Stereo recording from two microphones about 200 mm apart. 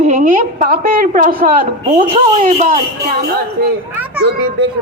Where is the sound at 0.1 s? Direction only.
40° right (ahead or behind).